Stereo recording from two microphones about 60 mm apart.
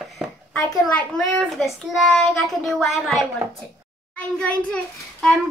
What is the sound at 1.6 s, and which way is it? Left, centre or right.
A child's voice, centre.